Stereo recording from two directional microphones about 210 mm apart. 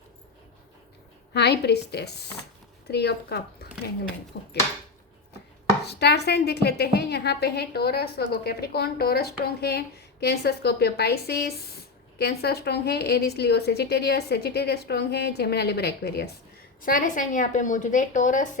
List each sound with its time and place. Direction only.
1.3 s a woman's voice: 50° left (ahead or behind)
5.8 s a woman's voice: 50° left (ahead or behind)